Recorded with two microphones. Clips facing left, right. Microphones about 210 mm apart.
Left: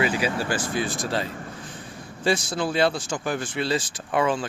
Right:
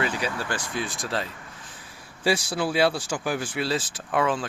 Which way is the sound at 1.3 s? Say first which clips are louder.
Left 8 dB; 50° left (ahead or behind).